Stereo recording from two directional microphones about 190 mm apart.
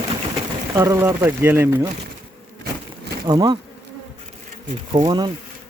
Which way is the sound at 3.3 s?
20° right (ahead or behind).